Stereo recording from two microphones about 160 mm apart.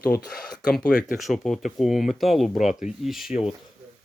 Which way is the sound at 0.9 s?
60° left (ahead or behind).